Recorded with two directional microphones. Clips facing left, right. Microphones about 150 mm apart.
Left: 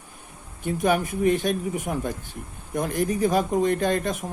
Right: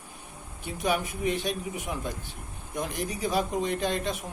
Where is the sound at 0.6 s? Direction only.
50° left (ahead or behind).